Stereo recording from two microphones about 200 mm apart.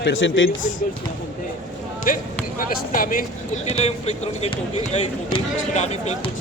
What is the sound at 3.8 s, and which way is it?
Speech, 30° left (ahead or behind).